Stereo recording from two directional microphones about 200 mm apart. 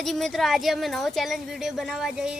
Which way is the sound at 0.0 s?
Centre (ahead or behind).